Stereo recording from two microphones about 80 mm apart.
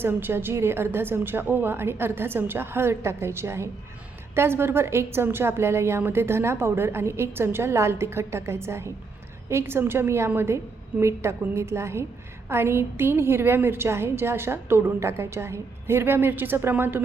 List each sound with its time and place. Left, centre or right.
0.0 s a woman's voice: right